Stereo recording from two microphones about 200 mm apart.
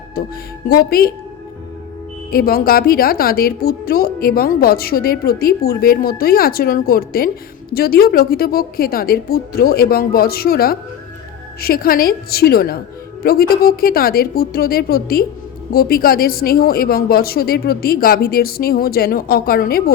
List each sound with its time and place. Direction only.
0.2 s a woman's voice: 50° left (ahead or behind)
2.3 s a woman's voice: 50° left (ahead or behind)